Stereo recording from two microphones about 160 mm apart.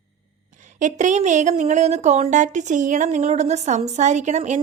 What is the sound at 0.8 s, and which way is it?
Speech, 50° right (ahead or behind).